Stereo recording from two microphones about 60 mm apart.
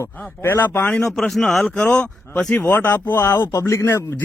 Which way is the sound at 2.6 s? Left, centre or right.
Left.